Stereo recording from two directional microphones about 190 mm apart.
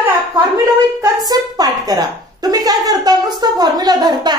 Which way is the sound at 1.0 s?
20° right (ahead or behind).